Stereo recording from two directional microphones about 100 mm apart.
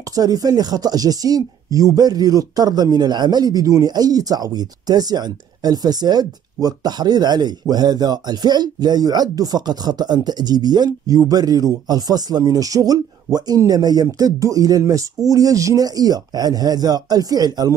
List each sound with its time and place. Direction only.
0.1 s speech: 40° right (ahead or behind)